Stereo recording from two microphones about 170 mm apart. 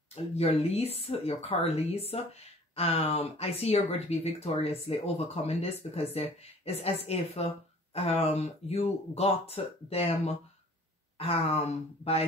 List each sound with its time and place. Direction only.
0.1 s speech: 35° left (ahead or behind)